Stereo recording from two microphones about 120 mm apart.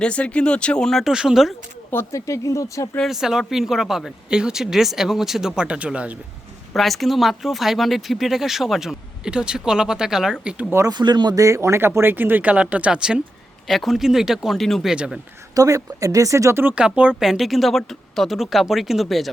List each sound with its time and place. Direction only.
0.0 s speech: 10° left (ahead or behind)
1.9 s speech: 20° left (ahead or behind)
3.0 s speech: 5° right (ahead or behind)
6.7 s speech: centre (ahead or behind)
10.9 s speech: 35° right (ahead or behind); by 15.2 s 5° right (ahead or behind)
15.5 s speech: 30° right (ahead or behind); by 19.3 s centre (ahead or behind)